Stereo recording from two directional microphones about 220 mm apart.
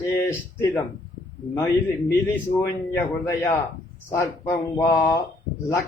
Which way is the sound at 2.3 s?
10° left (ahead or behind).